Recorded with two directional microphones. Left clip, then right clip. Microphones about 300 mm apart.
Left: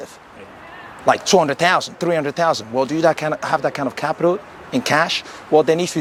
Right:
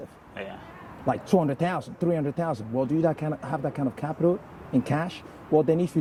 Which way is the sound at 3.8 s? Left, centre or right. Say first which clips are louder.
Left 8 dB; centre.